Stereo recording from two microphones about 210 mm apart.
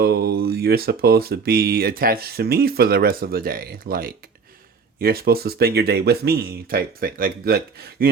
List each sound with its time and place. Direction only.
0.0 s speech: 50° right (ahead or behind)